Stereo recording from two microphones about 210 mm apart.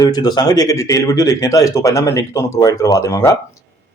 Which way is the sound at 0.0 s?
20° left (ahead or behind).